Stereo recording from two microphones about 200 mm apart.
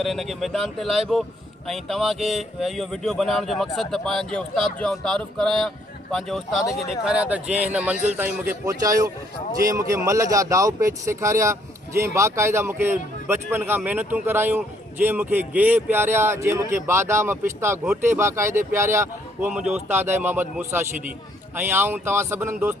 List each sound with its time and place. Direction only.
0.0 s a man's voice: centre (ahead or behind)